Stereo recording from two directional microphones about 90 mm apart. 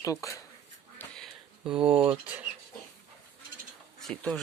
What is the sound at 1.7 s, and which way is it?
Speech, 10° right (ahead or behind).